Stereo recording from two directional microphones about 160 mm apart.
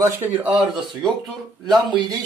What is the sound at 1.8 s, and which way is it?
Speech, 25° right (ahead or behind).